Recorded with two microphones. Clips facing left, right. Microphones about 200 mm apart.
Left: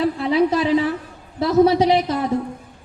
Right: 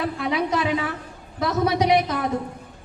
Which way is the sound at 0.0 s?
30° left (ahead or behind).